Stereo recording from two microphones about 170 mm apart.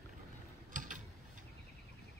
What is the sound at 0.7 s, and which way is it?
Typing, 50° right (ahead or behind).